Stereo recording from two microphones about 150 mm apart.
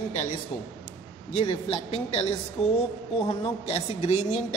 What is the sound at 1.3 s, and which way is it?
A woman's voice, 40° left (ahead or behind).